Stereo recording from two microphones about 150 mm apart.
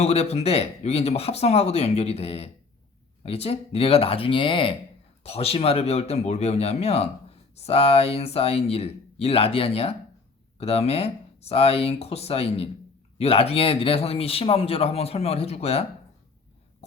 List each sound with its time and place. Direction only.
0.0 s speech: 45° left (ahead or behind)